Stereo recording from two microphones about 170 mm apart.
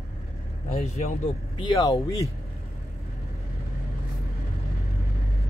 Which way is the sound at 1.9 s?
20° left (ahead or behind).